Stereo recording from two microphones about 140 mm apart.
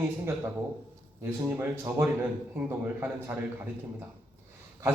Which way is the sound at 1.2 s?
15° right (ahead or behind).